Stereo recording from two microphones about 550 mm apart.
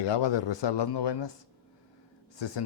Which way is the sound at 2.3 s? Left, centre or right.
Left.